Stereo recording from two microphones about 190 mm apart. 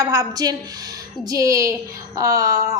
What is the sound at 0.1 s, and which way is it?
A woman's voice, 20° right (ahead or behind).